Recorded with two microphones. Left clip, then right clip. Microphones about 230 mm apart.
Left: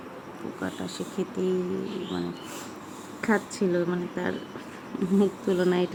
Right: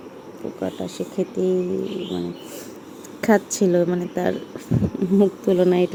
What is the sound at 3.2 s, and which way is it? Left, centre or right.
A woman's voice, centre.